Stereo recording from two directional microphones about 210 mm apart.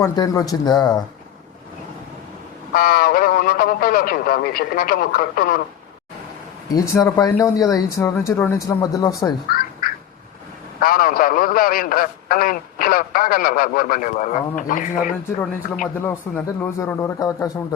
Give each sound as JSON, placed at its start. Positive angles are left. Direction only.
{"t": 0.0, "sound": "speech", "side_deg": 15}
{"t": 2.7, "sound": "speech", "side_deg": 45}
{"t": 6.7, "sound": "speech", "side_deg": 15}
{"t": 10.8, "sound": "a man's voice", "side_deg": 40}
{"t": 16.0, "sound": "speech", "side_deg": 10}